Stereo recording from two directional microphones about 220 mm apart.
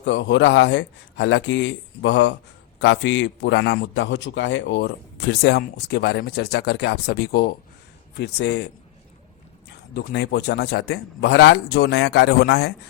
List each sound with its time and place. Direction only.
0.0 s a man's voice: 55° left (ahead or behind)
9.9 s a man's voice: 50° left (ahead or behind)